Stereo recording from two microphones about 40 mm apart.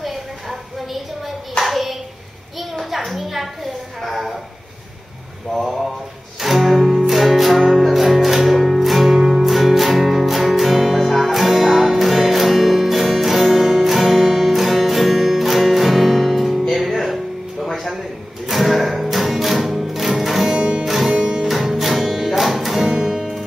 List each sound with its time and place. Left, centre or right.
0.0 s a sound: centre
1.6 s hands: centre
2.8 s a sound: centre
5.5 s a sound: centre
6.4 s music: centre
20.5 s music: right
20.8 s music: centre
21.1 s music: centre
21.5 s music: centre